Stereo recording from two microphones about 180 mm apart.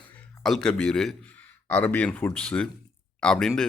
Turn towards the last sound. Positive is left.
turn(degrees=5)  # may be behind; listen again after turning